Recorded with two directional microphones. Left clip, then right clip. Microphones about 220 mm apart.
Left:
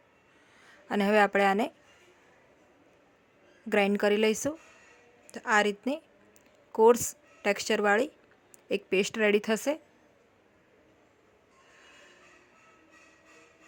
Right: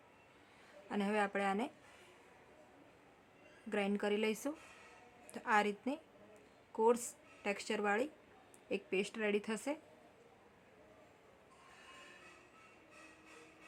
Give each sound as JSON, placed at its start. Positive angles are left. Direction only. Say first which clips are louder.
{"t": 0.9, "sound": "speech", "louder": "left 13 dB", "side_deg": 35}
{"t": 3.7, "sound": "a woman's voice", "louder": "left 12 dB", "side_deg": 35}